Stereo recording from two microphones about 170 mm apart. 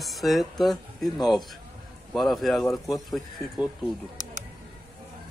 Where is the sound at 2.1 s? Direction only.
Centre (ahead or behind).